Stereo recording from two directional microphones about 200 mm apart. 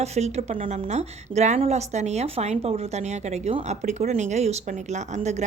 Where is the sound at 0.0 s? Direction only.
35° right (ahead or behind).